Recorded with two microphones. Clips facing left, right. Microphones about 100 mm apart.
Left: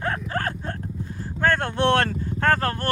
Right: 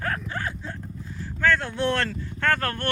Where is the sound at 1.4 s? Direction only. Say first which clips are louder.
Left 2 dB; 50° left (ahead or behind).